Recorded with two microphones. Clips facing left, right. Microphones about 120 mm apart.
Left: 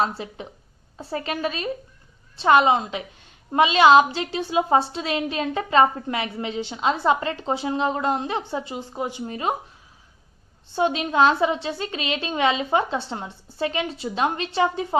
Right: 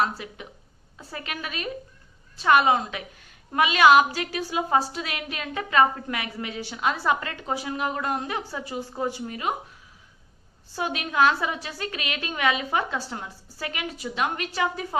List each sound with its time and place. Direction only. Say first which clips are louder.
0.2 s a woman's voice: left 5 dB; 30° left (ahead or behind)
9.2 s a woman's voice: left 3 dB; 30° left (ahead or behind)
10.7 s a woman's voice: left 7 dB; 25° left (ahead or behind)